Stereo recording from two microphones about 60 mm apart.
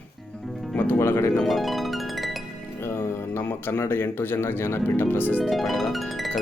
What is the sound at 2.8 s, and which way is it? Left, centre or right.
Speech, left.